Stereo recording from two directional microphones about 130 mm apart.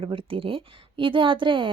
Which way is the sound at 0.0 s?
45° right (ahead or behind).